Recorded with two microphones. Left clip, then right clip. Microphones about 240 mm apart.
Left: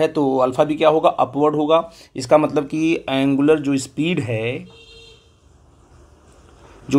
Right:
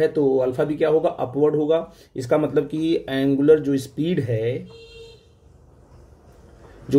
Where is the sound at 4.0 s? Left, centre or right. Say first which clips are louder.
Left 2 dB; left.